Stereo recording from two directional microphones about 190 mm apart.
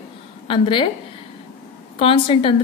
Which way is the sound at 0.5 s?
25° left (ahead or behind).